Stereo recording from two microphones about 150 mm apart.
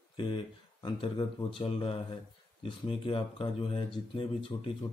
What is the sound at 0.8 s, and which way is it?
Speech, 35° left (ahead or behind).